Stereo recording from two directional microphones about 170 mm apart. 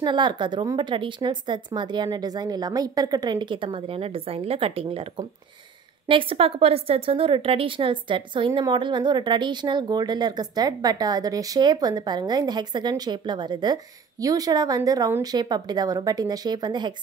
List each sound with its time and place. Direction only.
0.0 s a woman's voice: 25° right (ahead or behind)